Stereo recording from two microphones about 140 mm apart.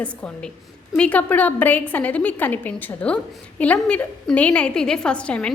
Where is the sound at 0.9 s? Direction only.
10° left (ahead or behind).